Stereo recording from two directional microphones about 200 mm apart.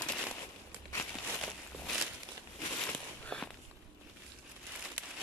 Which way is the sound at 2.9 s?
5° left (ahead or behind).